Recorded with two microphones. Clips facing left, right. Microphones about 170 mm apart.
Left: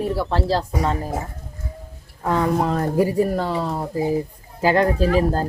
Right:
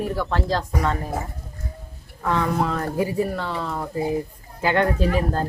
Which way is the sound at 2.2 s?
35° left (ahead or behind).